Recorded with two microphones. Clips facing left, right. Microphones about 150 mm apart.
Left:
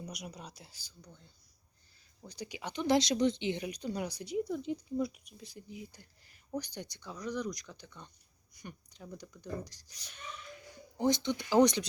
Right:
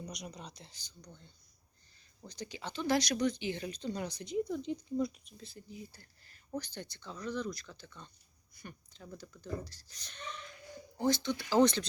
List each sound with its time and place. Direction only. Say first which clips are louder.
0.0 s speech: even; 10° left (ahead or behind)